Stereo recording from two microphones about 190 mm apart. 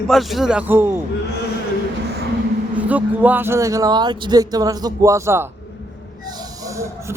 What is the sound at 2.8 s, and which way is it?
Speech, 10° right (ahead or behind).